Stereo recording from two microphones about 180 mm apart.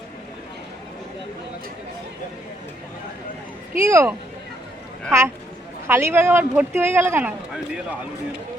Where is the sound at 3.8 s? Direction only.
15° right (ahead or behind).